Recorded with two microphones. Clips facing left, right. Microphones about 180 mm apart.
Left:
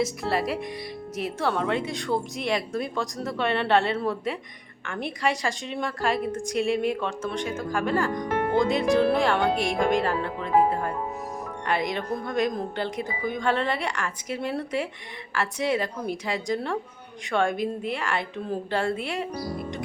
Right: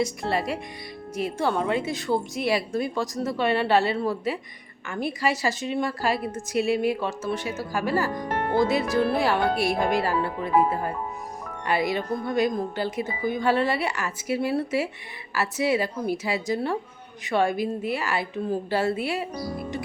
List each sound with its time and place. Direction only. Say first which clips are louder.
0.0 s speech: even; centre (ahead or behind)